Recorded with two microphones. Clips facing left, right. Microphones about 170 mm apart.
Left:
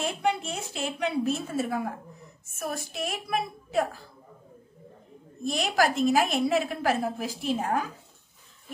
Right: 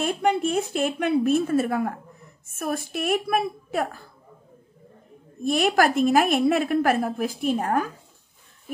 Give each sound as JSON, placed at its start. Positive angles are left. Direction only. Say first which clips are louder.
{"t": 0.0, "sound": "a woman's voice", "louder": "right 5 dB", "side_deg": -50}
{"t": 5.4, "sound": "a woman's voice", "louder": "right 5 dB", "side_deg": -55}